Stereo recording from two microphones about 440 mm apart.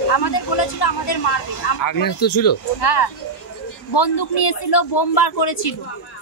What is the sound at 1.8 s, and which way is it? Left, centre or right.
Speech, left.